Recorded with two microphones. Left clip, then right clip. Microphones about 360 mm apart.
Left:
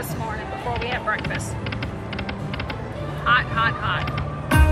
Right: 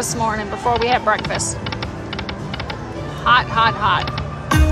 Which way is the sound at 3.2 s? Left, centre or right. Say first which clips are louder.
Right 5 dB; centre.